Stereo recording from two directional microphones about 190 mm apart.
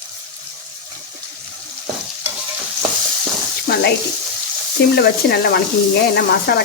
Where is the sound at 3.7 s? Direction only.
55° left (ahead or behind).